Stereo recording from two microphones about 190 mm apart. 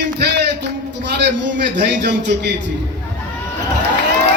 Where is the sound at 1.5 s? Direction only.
65° right (ahead or behind).